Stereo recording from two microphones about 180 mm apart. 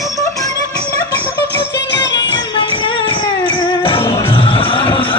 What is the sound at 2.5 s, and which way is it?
Music, 25° left (ahead or behind).